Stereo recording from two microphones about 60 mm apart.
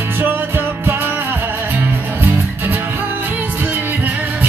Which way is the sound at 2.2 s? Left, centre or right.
Right.